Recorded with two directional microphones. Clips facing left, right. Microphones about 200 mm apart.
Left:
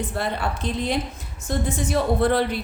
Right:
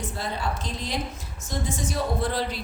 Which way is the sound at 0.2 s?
60° left (ahead or behind).